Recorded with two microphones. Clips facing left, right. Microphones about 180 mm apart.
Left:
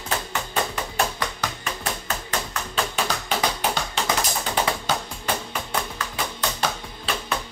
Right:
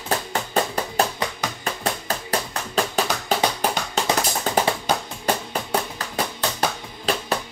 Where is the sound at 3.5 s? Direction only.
40° right (ahead or behind).